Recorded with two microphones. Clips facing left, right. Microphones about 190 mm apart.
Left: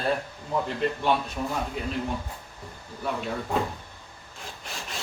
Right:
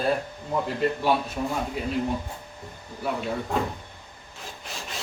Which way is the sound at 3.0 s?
Centre (ahead or behind).